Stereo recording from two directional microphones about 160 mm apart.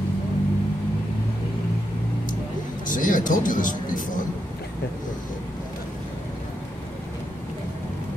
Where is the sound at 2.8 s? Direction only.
55° left (ahead or behind).